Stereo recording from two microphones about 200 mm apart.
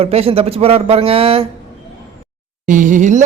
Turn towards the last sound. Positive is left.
turn(degrees=-40)  # may be behind; listen again after turning